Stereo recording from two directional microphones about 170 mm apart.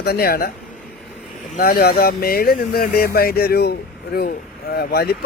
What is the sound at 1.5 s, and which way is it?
Speech, 60° left (ahead or behind).